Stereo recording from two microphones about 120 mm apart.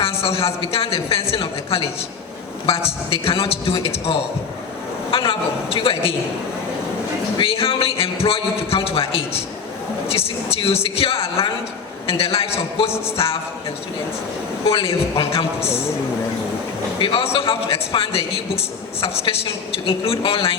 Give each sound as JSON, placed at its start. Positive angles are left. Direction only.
{"t": 0.0, "sound": "speech", "side_deg": 55}
{"t": 7.3, "sound": "speech", "side_deg": 50}
{"t": 14.6, "sound": "a woman's voice", "side_deg": 50}
{"t": 17.0, "sound": "speech", "side_deg": 50}